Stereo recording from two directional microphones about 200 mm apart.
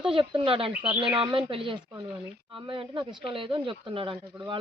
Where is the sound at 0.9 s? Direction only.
5° right (ahead or behind).